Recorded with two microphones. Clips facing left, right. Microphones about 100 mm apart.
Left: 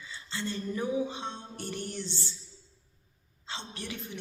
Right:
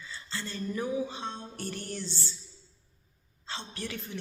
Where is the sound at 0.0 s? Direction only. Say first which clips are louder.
Left 2 dB; 20° left (ahead or behind).